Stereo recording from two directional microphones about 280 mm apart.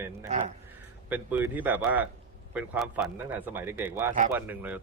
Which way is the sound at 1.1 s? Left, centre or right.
Centre.